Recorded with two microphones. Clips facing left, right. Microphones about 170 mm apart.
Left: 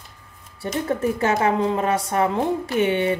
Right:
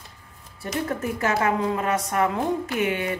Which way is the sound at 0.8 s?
25° left (ahead or behind).